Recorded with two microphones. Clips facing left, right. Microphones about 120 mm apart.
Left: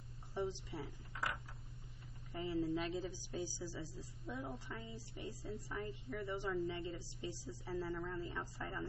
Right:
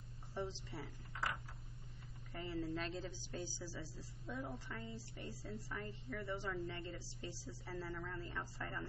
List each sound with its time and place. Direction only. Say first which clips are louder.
0.3 s speech: left 3 dB; 10° left (ahead or behind)
2.3 s a woman's voice: left 4 dB; 15° left (ahead or behind)